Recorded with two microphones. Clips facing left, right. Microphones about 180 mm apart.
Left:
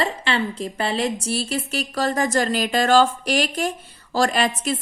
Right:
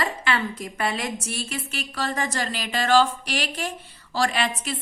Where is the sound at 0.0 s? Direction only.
30° left (ahead or behind).